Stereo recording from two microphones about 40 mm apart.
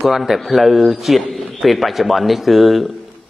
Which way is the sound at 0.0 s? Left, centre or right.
Centre.